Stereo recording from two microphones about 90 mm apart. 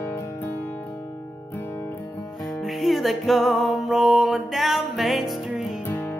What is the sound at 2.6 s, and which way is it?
Music, centre (ahead or behind).